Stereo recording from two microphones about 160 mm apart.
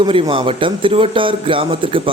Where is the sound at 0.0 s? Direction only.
35° right (ahead or behind).